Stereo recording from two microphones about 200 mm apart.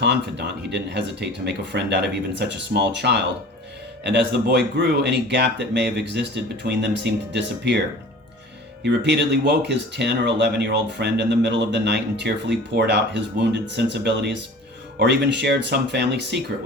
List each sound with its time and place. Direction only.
0.0 s speech: 60° right (ahead or behind)
8.8 s speech: 60° right (ahead or behind)